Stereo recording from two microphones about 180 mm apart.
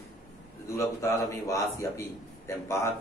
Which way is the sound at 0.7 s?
15° left (ahead or behind).